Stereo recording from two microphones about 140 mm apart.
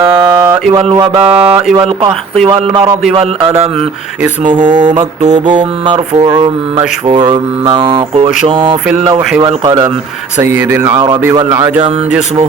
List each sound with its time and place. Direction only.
0.0 s a sound: 30° right (ahead or behind)
1.1 s mantra: 45° right (ahead or behind)
4.6 s mantra: 60° right (ahead or behind)
5.8 s mantra: 30° right (ahead or behind)
10.4 s speech: 15° right (ahead or behind)